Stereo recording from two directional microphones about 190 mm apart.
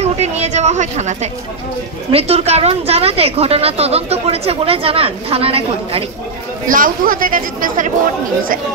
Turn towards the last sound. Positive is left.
turn(degrees=-45)  # may be behind; listen again after turning